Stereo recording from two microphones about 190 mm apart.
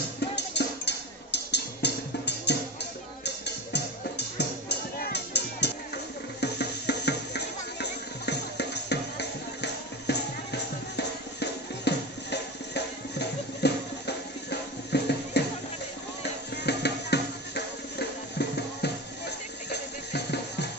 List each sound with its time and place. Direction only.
0.2 s music: 60° left (ahead or behind)